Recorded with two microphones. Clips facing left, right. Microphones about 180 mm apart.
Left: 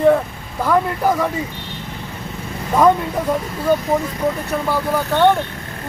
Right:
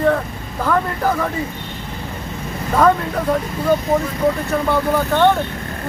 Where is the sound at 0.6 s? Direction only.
10° left (ahead or behind).